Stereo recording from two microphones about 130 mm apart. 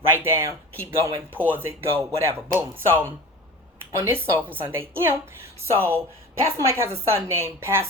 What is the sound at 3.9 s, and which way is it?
Speech, 20° right (ahead or behind).